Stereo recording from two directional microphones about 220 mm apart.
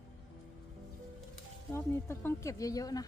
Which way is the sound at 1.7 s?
10° left (ahead or behind).